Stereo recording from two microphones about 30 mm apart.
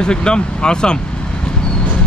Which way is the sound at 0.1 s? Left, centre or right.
Left.